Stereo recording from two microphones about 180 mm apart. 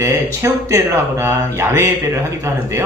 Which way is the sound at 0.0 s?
15° right (ahead or behind).